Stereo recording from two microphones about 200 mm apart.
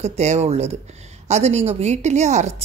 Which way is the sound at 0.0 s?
35° right (ahead or behind).